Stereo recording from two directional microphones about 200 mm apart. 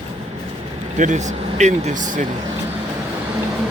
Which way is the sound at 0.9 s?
35° right (ahead or behind).